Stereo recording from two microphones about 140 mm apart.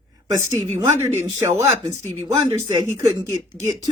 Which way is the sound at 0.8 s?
20° right (ahead or behind).